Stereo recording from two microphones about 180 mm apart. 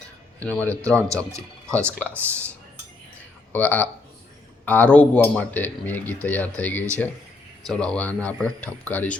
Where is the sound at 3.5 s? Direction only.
10° left (ahead or behind).